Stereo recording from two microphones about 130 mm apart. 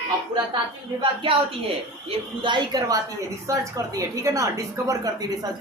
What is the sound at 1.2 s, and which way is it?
A woman's voice, 45° right (ahead or behind).